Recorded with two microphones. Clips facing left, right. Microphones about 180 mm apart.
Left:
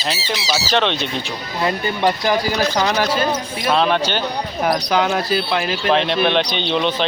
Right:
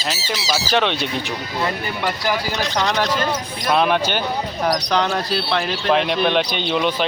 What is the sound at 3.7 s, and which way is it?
Speech, 10° right (ahead or behind).